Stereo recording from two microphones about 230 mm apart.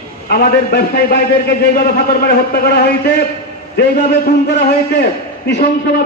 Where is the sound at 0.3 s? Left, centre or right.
Left.